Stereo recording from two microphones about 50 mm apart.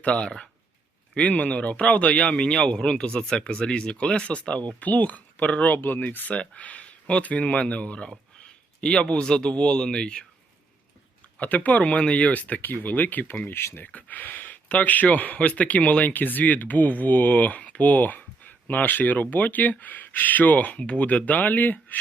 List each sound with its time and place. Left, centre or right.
0.0 s speech: left
6.3 s speech: left
11.3 s speech: left
13.6 s speech: left
13.8 s speech: left